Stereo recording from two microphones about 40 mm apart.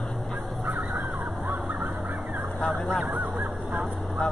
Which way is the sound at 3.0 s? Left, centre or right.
Centre.